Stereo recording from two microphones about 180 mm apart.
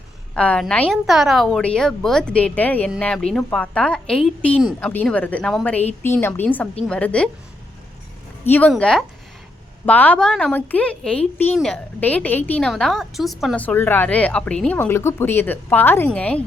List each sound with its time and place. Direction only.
0.3 s a woman's voice: 5° left (ahead or behind)
8.4 s a woman's voice: 10° left (ahead or behind)